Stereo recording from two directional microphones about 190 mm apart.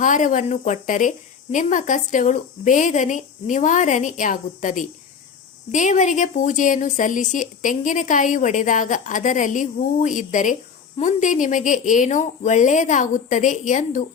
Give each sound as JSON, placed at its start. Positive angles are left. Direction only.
{"t": 0.0, "sound": "speech", "side_deg": 40}